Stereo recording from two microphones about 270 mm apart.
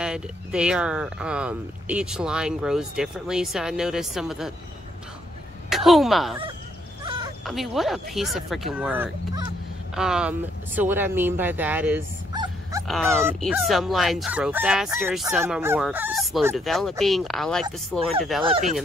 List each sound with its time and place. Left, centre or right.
0.0 s speech: centre
5.7 s speech: centre
7.4 s speech: centre
12.8 s speech: centre
18.4 s speech: right